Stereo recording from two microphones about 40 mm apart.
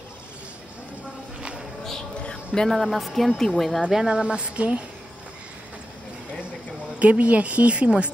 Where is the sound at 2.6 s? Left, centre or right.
Centre.